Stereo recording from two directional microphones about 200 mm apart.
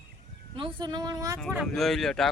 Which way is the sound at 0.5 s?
25° right (ahead or behind).